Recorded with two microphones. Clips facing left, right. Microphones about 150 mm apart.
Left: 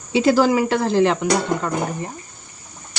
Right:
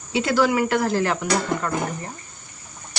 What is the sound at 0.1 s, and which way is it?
Speech, 30° left (ahead or behind).